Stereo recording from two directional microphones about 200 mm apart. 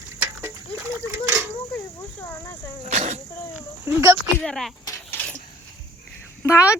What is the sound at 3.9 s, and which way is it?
Speech, 10° right (ahead or behind).